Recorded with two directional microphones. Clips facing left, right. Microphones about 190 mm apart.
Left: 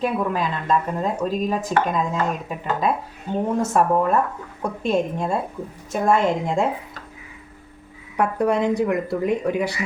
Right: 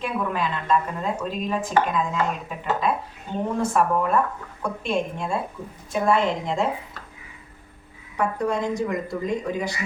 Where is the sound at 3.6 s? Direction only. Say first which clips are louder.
Left 2 dB; 40° left (ahead or behind).